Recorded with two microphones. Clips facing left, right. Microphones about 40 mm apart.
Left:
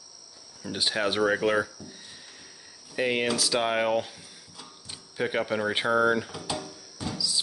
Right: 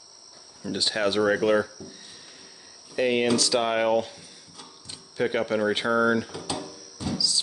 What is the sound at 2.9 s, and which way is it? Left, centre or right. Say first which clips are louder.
Speech: right 4 dB; centre.